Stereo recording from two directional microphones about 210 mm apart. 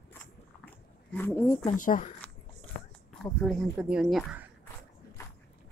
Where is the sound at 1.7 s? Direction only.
40° left (ahead or behind).